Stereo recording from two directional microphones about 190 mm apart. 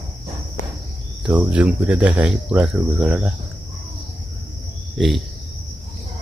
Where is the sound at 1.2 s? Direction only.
5° right (ahead or behind).